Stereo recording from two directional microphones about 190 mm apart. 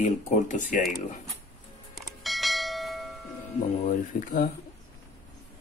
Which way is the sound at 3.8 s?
45° left (ahead or behind).